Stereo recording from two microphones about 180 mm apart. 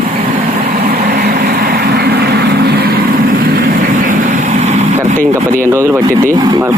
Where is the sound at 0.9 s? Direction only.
60° right (ahead or behind).